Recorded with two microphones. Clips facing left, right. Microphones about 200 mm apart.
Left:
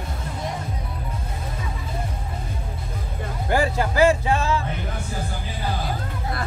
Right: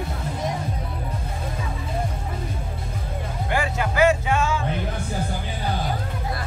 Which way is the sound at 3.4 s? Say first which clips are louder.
Left 4 dB; 35° left (ahead or behind).